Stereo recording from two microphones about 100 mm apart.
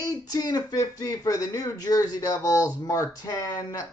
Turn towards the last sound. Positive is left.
turn(degrees=35)  # may be behind; listen again after turning